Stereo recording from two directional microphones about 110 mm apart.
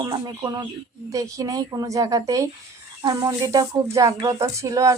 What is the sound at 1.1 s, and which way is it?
Speech, 30° right (ahead or behind).